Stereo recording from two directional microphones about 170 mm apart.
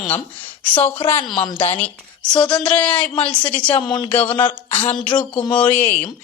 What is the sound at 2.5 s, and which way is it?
Speech, 10° left (ahead or behind).